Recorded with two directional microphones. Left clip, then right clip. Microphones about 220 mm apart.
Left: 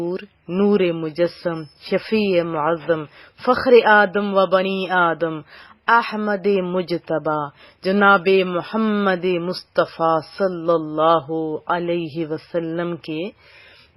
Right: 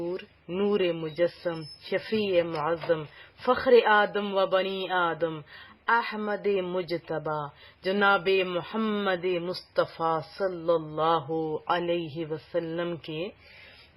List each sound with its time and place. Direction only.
0.1 s speech: 20° left (ahead or behind)